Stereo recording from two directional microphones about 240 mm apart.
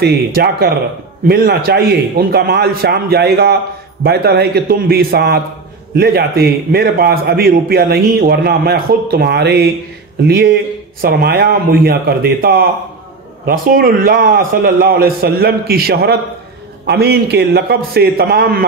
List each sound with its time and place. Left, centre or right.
0.0 s a man's voice: right